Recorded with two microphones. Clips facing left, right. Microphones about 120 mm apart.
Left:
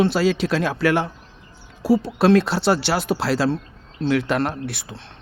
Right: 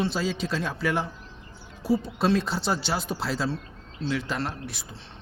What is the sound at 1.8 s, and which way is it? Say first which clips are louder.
Speech: left 7 dB; 90° left.